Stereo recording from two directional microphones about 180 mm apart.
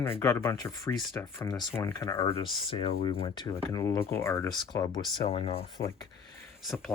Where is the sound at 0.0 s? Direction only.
15° left (ahead or behind).